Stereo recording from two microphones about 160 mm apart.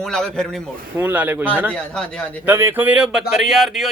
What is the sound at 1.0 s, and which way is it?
Speech, 10° right (ahead or behind).